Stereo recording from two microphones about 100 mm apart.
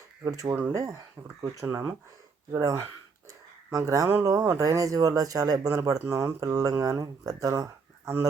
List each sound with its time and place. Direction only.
0.3 s speech: 35° right (ahead or behind)
3.2 s a sound: 30° right (ahead or behind)
4.2 s speech: 35° right (ahead or behind)